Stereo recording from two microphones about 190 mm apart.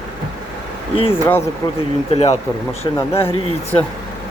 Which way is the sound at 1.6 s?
15° left (ahead or behind).